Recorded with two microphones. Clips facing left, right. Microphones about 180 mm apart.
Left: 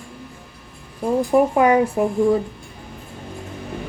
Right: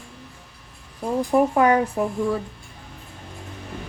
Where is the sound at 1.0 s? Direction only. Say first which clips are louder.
Left 3 dB; 10° left (ahead or behind).